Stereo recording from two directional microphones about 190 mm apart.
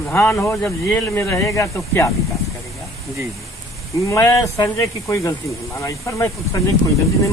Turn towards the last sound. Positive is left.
turn(degrees=15)  # may be behind; listen again after turning